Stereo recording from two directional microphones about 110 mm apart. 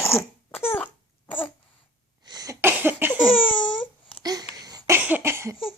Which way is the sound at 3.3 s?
50° left (ahead or behind).